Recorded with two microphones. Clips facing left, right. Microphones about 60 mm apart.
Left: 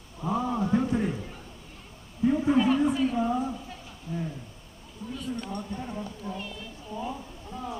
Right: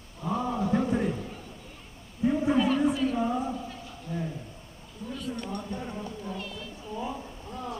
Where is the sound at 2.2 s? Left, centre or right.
Centre.